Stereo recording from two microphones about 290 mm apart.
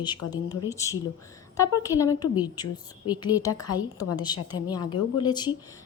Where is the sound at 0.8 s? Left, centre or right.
Centre.